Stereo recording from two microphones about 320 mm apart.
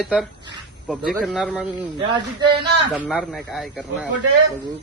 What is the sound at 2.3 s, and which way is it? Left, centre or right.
Speech, centre.